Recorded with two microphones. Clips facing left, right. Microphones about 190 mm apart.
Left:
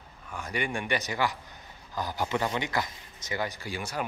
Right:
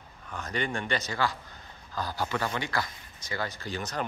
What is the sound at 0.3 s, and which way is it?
A man's voice, 10° left (ahead or behind).